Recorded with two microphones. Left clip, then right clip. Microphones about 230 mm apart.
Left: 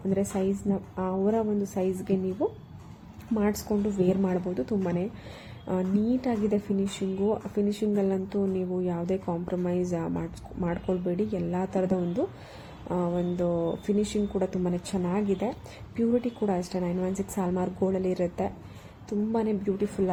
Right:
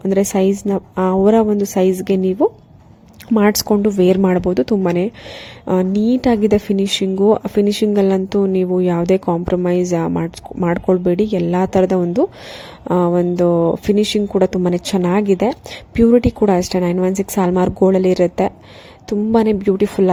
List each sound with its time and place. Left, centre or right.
0.1 s speech: right